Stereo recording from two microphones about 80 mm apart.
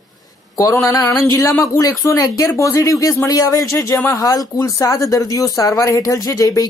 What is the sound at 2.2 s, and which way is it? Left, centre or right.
Speech, left.